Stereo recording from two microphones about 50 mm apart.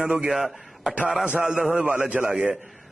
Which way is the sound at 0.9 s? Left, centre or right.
Right.